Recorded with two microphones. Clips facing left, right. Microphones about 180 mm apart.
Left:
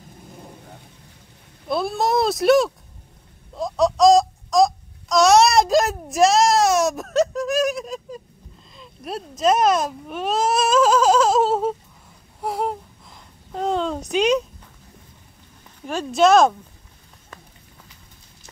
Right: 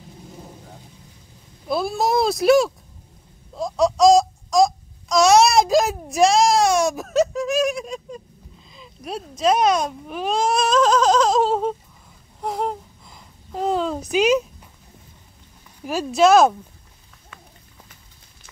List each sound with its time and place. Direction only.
0.3 s vehicle: centre (ahead or behind)
1.7 s a child's voice: centre (ahead or behind)
3.5 s babbling: centre (ahead or behind)
8.7 s a sound: centre (ahead or behind)
9.4 s speech: centre (ahead or behind)
12.4 s a sound: 5° left (ahead or behind)
15.8 s a child's voice: 5° right (ahead or behind)